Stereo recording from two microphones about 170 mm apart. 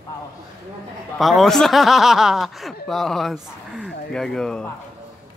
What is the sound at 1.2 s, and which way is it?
Speech, centre (ahead or behind).